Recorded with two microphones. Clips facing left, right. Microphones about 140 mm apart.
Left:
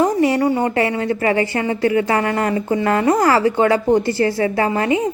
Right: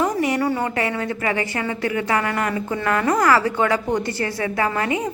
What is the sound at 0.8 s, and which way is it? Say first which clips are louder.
A woman's voice: left 5 dB; 30° left (ahead or behind).